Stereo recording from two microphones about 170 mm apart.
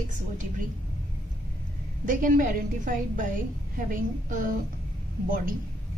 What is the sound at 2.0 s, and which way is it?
A woman's voice, 55° right (ahead or behind).